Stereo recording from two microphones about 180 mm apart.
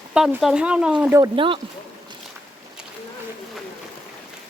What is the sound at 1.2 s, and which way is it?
Speech, 30° right (ahead or behind).